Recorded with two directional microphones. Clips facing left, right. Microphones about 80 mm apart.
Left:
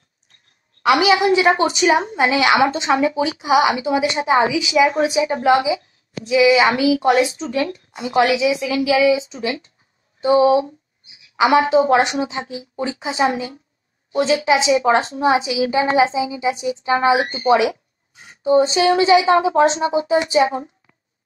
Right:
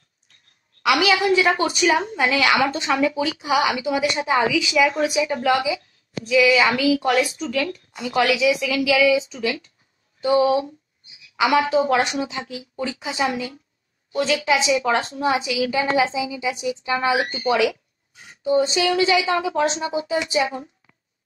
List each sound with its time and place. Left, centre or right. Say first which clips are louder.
0.8 s a woman's voice: left 4 dB; left
4.8 s a woman's voice: left 3 dB; left
6.7 s a woman's voice: left 3 dB; left